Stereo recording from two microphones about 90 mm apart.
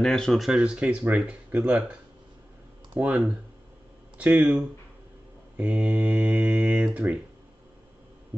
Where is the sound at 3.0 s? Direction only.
15° right (ahead or behind).